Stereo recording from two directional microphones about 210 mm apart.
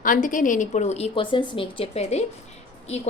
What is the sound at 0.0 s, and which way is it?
A woman's voice, 40° left (ahead or behind).